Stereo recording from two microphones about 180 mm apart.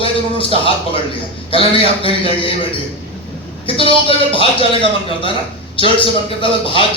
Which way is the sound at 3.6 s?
30° left (ahead or behind).